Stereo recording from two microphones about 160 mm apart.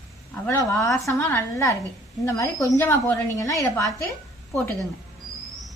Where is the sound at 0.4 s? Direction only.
20° left (ahead or behind).